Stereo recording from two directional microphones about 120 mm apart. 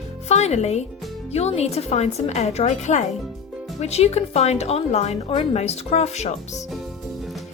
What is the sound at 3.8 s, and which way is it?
A woman's voice, 60° left (ahead or behind).